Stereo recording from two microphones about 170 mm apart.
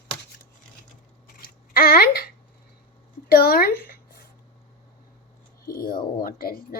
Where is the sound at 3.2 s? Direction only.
60° left (ahead or behind).